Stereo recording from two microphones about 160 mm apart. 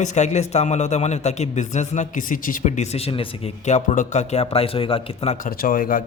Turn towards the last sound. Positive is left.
turn(degrees=60)  # may be behind; listen again after turning